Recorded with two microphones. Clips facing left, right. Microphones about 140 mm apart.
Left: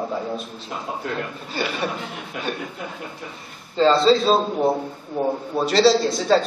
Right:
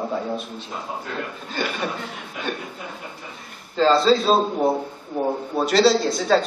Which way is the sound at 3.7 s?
Centre (ahead or behind).